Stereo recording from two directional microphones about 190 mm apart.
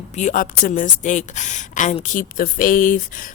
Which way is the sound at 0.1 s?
40° left (ahead or behind).